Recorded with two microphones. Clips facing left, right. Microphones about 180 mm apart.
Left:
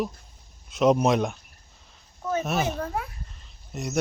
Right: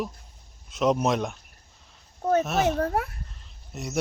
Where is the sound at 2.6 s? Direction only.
65° right (ahead or behind).